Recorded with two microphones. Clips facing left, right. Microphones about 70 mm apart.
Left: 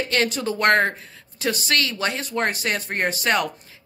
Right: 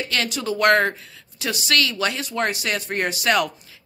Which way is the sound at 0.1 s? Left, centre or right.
Left.